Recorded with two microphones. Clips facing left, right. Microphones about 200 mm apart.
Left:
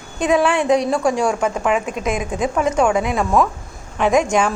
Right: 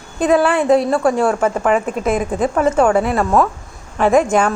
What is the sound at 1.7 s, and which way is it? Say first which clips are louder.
Speech: right 3 dB; 40° right (ahead or behind).